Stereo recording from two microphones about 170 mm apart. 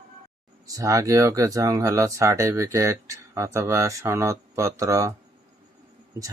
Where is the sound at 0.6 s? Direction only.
20° right (ahead or behind).